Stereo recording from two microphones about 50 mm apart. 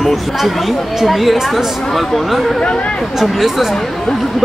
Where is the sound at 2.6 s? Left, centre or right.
Left.